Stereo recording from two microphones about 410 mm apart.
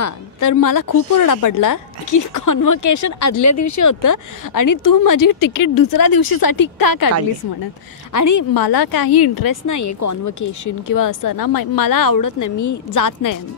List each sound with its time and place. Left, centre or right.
0.0 s a woman's voice: left
8.1 s a woman's voice: left